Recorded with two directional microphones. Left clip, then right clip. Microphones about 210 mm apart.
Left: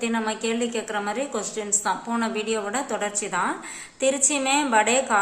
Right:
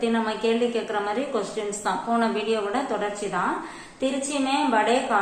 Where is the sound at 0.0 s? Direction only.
35° left (ahead or behind).